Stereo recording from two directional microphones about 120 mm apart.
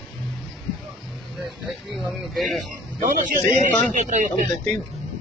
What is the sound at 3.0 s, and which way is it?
A man's voice, 90° right.